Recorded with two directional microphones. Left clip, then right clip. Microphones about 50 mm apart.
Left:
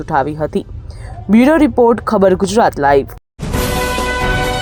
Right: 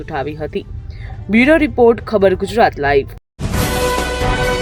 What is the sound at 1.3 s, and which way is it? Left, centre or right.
Speech, left.